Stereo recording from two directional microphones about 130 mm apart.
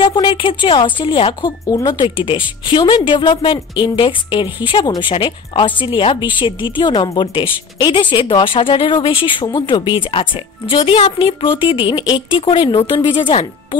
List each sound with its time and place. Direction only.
0.0 s speech: 35° left (ahead or behind)